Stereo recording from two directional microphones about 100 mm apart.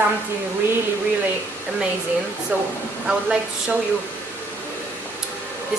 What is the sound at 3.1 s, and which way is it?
Speech, 5° right (ahead or behind).